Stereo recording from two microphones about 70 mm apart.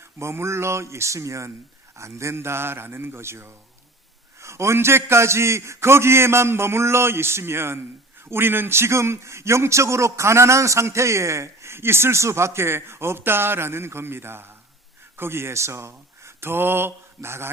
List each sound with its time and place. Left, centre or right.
0.2 s a man's voice: right